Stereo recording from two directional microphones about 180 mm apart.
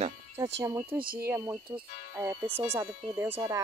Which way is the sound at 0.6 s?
15° right (ahead or behind).